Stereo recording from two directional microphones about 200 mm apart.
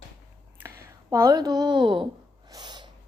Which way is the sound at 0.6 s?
15° right (ahead or behind).